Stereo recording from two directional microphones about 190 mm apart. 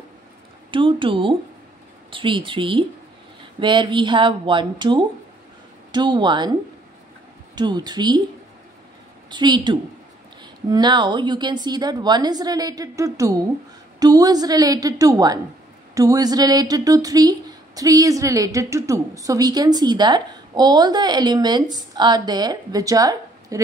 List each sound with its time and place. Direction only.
0.7 s a woman's voice: 25° right (ahead or behind)
7.5 s a woman's voice: 20° right (ahead or behind)
9.3 s a woman's voice: 25° right (ahead or behind)